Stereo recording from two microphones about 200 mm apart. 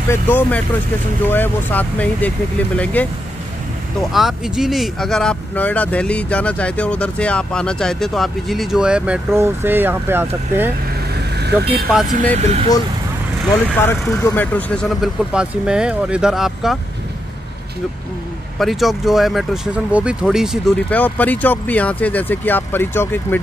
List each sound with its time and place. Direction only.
0.1 s speech: 10° left (ahead or behind)
4.1 s speech: centre (ahead or behind)
11.3 s vehicle: 55° right (ahead or behind)
12.3 s speech: 20° left (ahead or behind); by 16.7 s centre (ahead or behind)
18.6 s speech: centre (ahead or behind)